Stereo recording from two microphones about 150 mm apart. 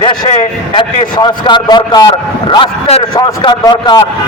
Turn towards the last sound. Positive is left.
turn(degrees=30)  # may be behind; listen again after turning